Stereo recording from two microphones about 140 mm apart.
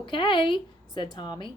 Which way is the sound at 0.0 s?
35° left (ahead or behind).